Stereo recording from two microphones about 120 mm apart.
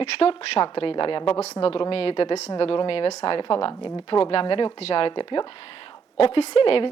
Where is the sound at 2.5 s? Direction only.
45° left (ahead or behind).